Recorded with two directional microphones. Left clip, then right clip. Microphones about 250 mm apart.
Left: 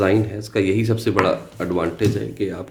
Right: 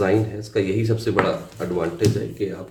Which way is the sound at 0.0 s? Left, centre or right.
Left.